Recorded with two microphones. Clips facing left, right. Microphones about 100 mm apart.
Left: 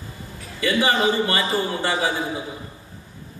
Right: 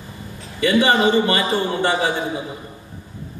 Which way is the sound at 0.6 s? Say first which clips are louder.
Right 4 dB; 25° right (ahead or behind).